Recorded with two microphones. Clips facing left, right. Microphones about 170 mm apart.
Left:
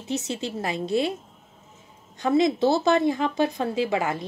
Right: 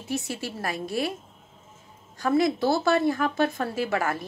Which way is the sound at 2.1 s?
20° left (ahead or behind).